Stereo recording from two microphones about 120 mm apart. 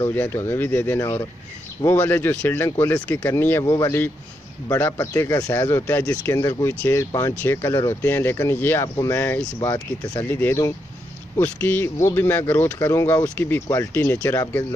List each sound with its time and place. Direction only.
0.1 s speech: 15° left (ahead or behind)
8.8 s speech: 30° left (ahead or behind)
9.1 s speech: 15° left (ahead or behind)
9.6 s speech: 30° left (ahead or behind)
10.2 s speech: 15° left (ahead or behind)